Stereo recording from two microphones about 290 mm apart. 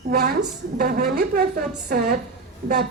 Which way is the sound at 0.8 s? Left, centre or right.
Right.